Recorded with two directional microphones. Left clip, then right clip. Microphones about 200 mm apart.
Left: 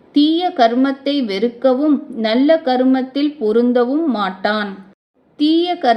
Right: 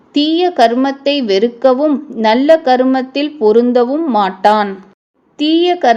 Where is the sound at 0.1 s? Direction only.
25° right (ahead or behind).